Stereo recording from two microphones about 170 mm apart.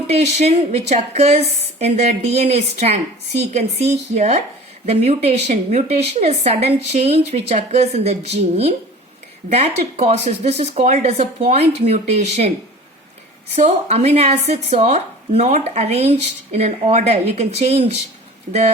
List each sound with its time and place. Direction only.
0.1 s speech: 40° right (ahead or behind)
13.6 s speech: 40° right (ahead or behind)